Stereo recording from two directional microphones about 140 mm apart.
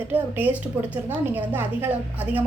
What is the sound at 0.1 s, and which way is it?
Speech, 15° right (ahead or behind).